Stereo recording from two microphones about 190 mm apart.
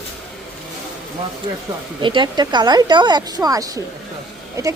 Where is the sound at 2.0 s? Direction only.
25° right (ahead or behind).